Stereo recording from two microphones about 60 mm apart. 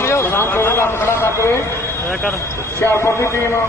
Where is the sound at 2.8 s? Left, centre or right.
Left.